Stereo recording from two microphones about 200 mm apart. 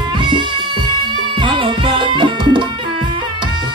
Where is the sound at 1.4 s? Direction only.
25° right (ahead or behind).